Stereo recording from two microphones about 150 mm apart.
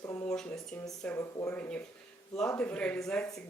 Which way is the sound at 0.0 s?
20° left (ahead or behind).